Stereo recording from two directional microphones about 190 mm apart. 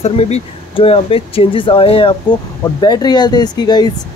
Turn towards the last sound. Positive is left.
turn(degrees=20)  # may be behind; listen again after turning